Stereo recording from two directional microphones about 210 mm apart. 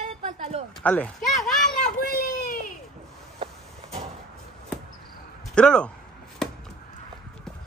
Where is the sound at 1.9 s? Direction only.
45° left (ahead or behind).